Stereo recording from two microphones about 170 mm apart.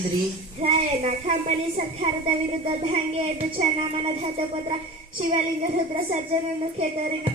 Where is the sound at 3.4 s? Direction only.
30° right (ahead or behind).